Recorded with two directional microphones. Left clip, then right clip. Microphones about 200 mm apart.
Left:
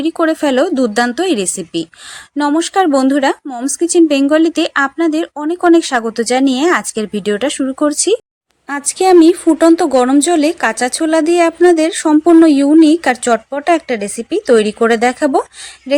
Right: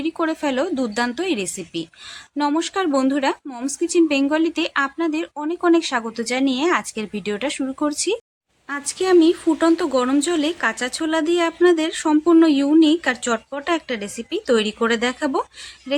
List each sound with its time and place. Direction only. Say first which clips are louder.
0.0 s speech: left 8 dB; 30° left (ahead or behind)